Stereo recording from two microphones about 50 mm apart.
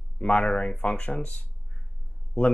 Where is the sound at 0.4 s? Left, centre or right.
Centre.